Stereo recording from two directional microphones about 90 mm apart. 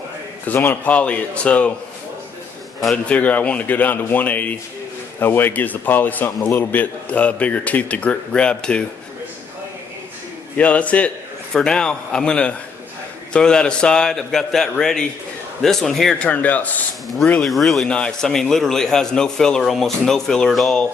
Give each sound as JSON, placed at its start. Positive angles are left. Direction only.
{"t": 0.4, "sound": "a man's voice", "side_deg": 20}
{"t": 2.9, "sound": "a man's voice", "side_deg": 15}
{"t": 10.6, "sound": "a man's voice", "side_deg": 15}
{"t": 17.1, "sound": "a man's voice", "side_deg": 0}